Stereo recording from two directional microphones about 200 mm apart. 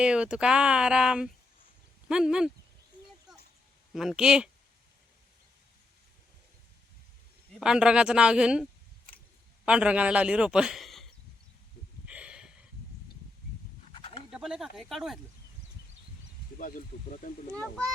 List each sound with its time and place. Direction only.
0.0 s a man's voice: 5° right (ahead or behind)
3.9 s a man's voice: centre (ahead or behind)
7.6 s a man's voice: 5° right (ahead or behind)
9.6 s a man's voice: 5° right (ahead or behind)
12.0 s a sound: 5° right (ahead or behind)
14.0 s bird: 30° left (ahead or behind)
14.3 s a sound: 5° right (ahead or behind)
14.8 s a man's voice: centre (ahead or behind)
16.6 s speech: 45° left (ahead or behind)
17.5 s a man's voice: 5° left (ahead or behind)